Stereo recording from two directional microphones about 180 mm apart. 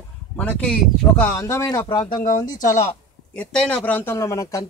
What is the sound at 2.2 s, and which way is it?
Speech, 45° left (ahead or behind).